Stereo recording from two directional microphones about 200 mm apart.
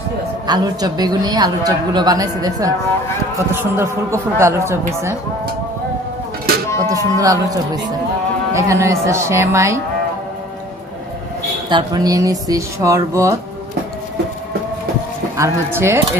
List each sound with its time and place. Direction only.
0.4 s a woman's voice: 20° right (ahead or behind)
6.7 s a sound: 15° right (ahead or behind)
7.2 s speech: 15° right (ahead or behind)
11.7 s speech: 20° right (ahead or behind)
15.4 s speech: 15° right (ahead or behind)